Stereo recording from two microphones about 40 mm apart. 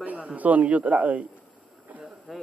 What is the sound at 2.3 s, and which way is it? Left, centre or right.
Speech, centre.